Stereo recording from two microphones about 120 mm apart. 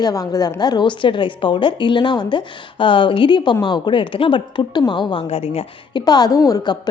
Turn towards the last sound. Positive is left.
turn(degrees=35)  # may be behind; listen again after turning